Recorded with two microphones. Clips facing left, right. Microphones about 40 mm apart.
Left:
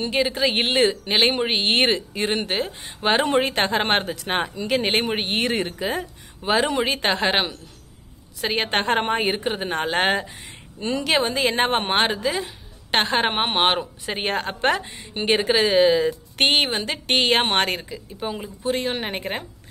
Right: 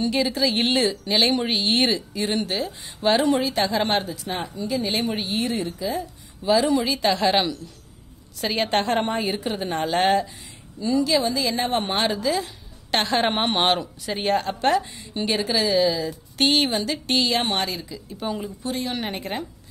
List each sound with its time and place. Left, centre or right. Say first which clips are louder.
0.0 s a woman's voice: left 1 dB; left
4.6 s speech: left 3 dB; left
4.8 s speech: left 3 dB; left
6.4 s a woman's voice: right 1 dB; left
10.8 s speech: right 1 dB; left
14.0 s a woman's voice: right 4 dB; left
18.2 s speech: right 1 dB; centre
18.7 s a woman's voice: left 4 dB; left